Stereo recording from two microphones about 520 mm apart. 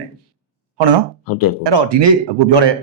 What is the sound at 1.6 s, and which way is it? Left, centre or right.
Speech, right.